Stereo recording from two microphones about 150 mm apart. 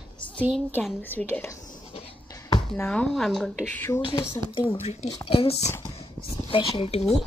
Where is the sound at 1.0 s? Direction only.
15° left (ahead or behind).